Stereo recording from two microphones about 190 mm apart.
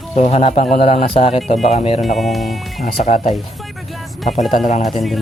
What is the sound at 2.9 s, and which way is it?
Speech, 40° left (ahead or behind).